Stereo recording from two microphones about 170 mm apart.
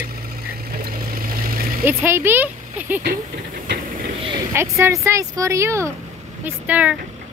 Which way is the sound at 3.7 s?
80° right.